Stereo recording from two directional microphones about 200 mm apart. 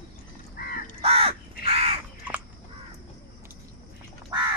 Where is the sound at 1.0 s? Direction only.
30° right (ahead or behind).